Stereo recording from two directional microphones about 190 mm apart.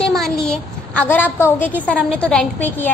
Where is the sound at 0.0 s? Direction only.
Centre (ahead or behind).